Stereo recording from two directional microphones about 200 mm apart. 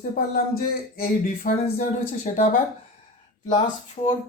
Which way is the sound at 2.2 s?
40° left (ahead or behind).